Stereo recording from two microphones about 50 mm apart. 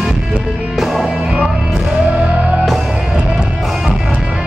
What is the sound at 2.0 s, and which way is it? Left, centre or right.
Music, right.